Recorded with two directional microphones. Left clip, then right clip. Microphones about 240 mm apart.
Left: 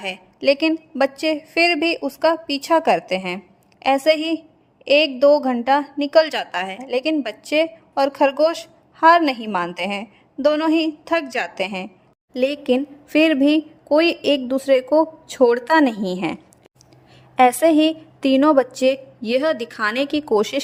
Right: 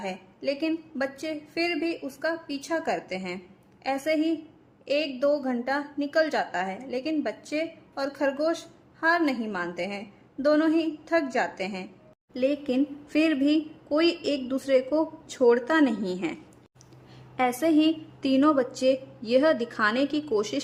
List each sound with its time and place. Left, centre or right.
0.0 s a woman's voice: left